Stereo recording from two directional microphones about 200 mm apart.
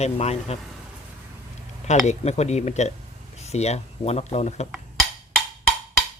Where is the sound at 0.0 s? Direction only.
35° left (ahead or behind).